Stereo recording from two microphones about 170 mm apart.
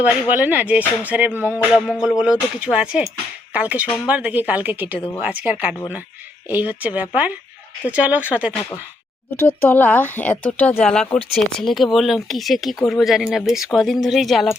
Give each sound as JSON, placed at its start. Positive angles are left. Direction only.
{"t": 0.0, "sound": "speech", "side_deg": -10}
{"t": 4.9, "sound": "speech", "side_deg": 30}
{"t": 5.2, "sound": "speech", "side_deg": -10}
{"t": 9.3, "sound": "speech", "side_deg": 10}